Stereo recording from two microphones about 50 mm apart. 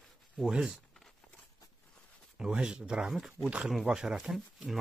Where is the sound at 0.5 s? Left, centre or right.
Centre.